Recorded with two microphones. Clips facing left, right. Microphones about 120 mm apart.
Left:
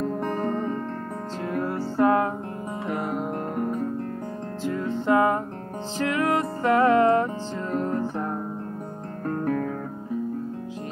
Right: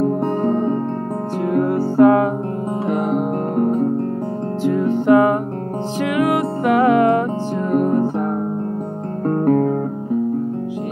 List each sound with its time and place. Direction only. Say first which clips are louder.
0.2 s music: right 8 dB; 30° right (ahead or behind)
3.5 s music: right 11 dB; 30° right (ahead or behind)
4.6 s music: right 9 dB; 20° right (ahead or behind)
9.2 s music: right 10 dB; 35° right (ahead or behind)